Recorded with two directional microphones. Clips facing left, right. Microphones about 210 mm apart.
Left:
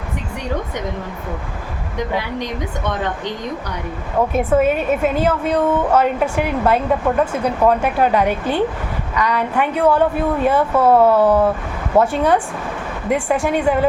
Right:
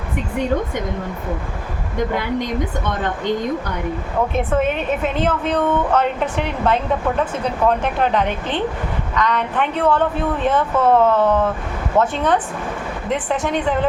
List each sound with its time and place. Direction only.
4.6 s a woman's voice: 10° left (ahead or behind)